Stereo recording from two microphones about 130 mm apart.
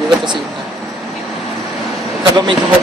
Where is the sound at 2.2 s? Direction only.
35° right (ahead or behind).